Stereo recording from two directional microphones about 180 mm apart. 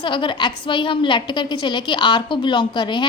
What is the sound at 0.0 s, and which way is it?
A woman's voice, 25° left (ahead or behind).